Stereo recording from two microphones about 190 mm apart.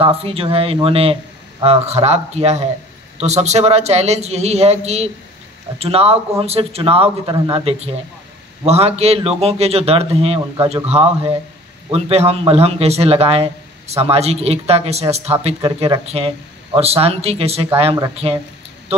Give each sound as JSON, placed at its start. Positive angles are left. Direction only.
{"t": 0.0, "sound": "a man's voice", "side_deg": -30}